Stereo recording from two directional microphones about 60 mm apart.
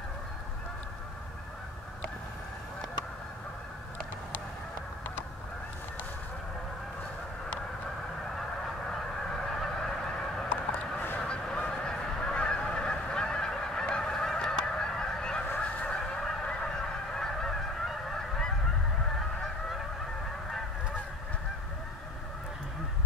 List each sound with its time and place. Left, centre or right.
9.6 s fowl: centre
10.5 s a sound: left
11.1 s goose: centre
15.6 s fowl: centre
16.4 s goose: centre